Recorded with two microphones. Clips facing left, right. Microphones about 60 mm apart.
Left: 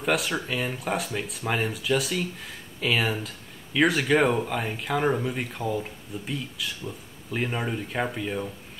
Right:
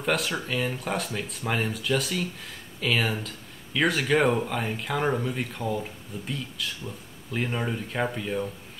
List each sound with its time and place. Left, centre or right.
0.0 s speech: centre